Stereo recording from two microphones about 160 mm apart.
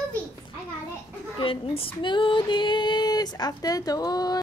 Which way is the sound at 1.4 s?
35° left (ahead or behind).